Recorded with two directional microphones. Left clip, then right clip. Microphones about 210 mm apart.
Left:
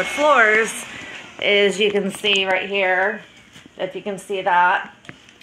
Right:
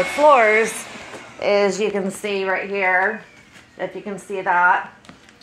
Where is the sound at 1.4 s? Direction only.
20° left (ahead or behind).